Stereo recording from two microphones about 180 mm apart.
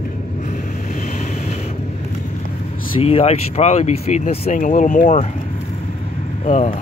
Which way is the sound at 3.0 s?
35° left (ahead or behind).